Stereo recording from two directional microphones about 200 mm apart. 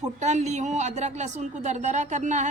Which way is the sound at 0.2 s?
35° right (ahead or behind).